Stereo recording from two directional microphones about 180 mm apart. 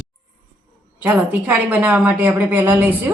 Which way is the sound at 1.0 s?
10° right (ahead or behind).